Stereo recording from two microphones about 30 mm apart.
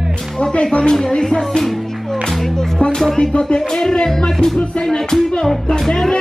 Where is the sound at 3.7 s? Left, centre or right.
Centre.